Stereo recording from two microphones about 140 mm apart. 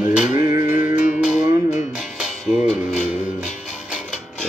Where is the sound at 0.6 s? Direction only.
60° left (ahead or behind).